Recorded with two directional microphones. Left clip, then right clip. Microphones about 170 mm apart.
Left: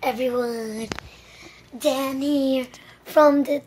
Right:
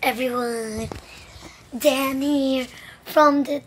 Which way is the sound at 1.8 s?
15° right (ahead or behind).